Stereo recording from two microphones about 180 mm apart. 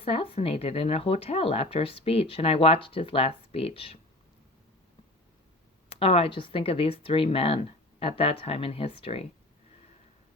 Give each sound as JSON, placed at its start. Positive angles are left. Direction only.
{"t": 0.0, "sound": "speech", "side_deg": 30}
{"t": 5.9, "sound": "speech", "side_deg": 35}